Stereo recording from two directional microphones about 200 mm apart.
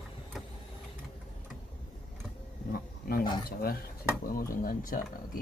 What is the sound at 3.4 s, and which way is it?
Speech, 50° left (ahead or behind).